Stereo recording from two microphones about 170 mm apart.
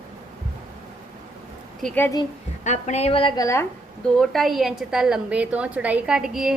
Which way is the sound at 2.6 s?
45° left (ahead or behind).